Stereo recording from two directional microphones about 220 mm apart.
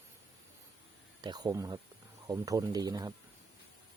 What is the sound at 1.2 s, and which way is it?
Speech, 20° right (ahead or behind).